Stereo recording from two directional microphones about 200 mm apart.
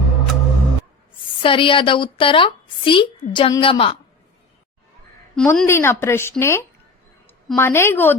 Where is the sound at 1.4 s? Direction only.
25° left (ahead or behind).